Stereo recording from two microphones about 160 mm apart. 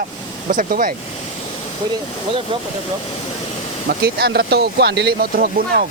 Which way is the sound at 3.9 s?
85° right.